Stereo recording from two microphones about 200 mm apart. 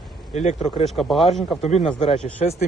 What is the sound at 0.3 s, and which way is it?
Speech, 35° left (ahead or behind).